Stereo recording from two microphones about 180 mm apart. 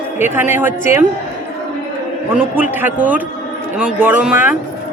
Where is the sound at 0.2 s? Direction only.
10° right (ahead or behind).